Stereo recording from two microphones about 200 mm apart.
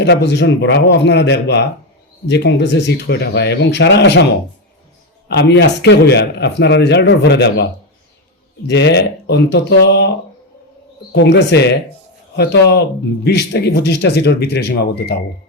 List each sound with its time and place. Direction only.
0.0 s speech: 55° left (ahead or behind)
5.3 s speech: 55° left (ahead or behind)
11.1 s speech: 60° left (ahead or behind)